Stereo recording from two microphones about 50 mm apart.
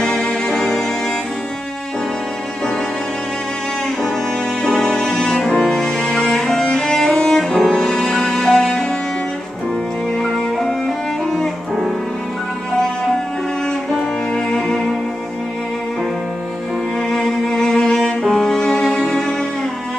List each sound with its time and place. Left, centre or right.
0.0 s music: centre
4.6 s music: centre
7.1 s cello: left
7.3 s music: centre
10.1 s music: centre
13.9 s music: centre
17.1 s cello: centre